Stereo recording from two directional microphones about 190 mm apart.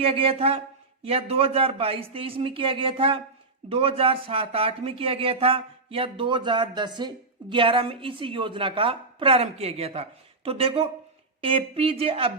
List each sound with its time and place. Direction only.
0.0 s speech: 30° right (ahead or behind)